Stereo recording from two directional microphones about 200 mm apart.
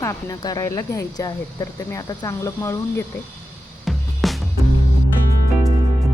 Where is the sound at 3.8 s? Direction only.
Centre (ahead or behind).